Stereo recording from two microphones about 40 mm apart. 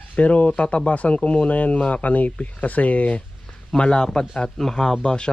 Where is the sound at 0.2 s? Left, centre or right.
Left.